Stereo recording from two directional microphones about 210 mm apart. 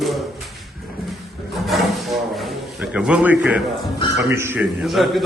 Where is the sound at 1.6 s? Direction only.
Centre (ahead or behind).